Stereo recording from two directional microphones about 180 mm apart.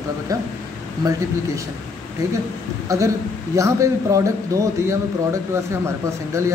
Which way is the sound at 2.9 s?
15° right (ahead or behind).